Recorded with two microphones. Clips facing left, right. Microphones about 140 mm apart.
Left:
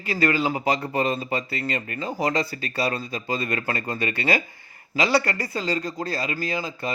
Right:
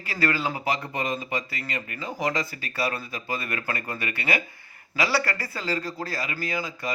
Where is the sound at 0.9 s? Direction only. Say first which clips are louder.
Left 5 dB; 30° left (ahead or behind).